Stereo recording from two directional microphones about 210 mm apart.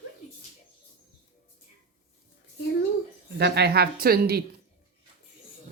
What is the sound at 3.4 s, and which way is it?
A woman's voice, 50° right (ahead or behind).